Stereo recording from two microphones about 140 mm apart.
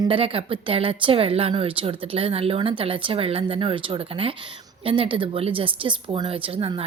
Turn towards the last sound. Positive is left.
turn(degrees=-40)  # may be behind; listen again after turning